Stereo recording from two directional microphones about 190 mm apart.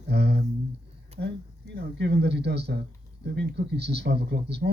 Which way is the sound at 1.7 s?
60° right (ahead or behind).